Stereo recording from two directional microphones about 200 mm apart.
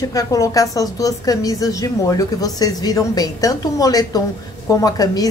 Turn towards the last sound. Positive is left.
turn(degrees=20)  # may be behind; listen again after turning